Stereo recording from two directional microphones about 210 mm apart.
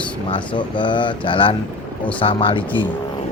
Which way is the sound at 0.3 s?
25° left (ahead or behind).